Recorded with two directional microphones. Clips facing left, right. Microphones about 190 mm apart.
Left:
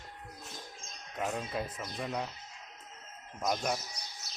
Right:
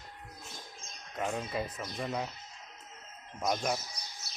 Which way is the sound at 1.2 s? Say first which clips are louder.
Right 1 dB; centre (ahead or behind).